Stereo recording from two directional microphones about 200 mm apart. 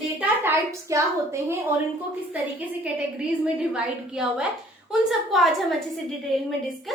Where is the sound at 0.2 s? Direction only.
10° right (ahead or behind).